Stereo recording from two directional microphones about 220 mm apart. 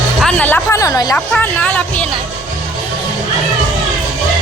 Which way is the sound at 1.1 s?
5° left (ahead or behind).